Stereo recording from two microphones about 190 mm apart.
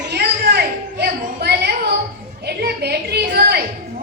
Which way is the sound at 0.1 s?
60° right (ahead or behind).